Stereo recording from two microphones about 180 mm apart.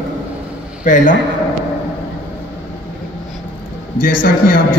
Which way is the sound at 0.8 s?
45° left (ahead or behind).